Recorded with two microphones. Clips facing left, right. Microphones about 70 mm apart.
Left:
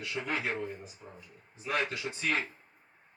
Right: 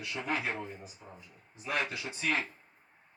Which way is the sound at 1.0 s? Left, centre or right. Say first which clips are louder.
Left 1 dB; centre.